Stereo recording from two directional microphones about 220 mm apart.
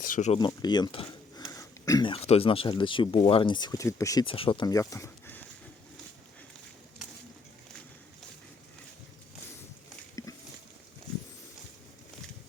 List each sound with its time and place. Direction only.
0.1 s speech: 35° left (ahead or behind)
0.3 s speech: 20° left (ahead or behind)